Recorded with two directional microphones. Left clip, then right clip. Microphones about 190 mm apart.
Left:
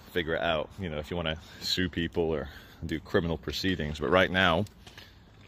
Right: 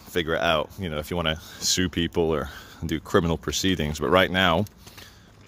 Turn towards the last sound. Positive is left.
turn(degrees=-10)  # may be behind; listen again after turning